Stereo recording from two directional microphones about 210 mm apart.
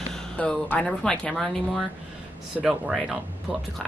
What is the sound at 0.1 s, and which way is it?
Speech, 5° left (ahead or behind).